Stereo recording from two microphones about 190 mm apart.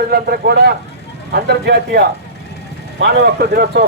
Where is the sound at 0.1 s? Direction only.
55° right (ahead or behind).